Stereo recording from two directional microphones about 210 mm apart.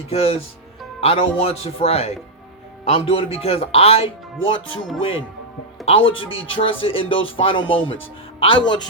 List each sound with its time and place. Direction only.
0.1 s a man's voice: 25° left (ahead or behind)